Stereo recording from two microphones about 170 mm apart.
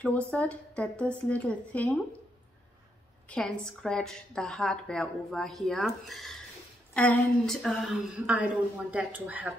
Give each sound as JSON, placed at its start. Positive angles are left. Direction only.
{"t": 0.0, "sound": "a woman's voice", "side_deg": 10}
{"t": 3.3, "sound": "a woman's voice", "side_deg": 5}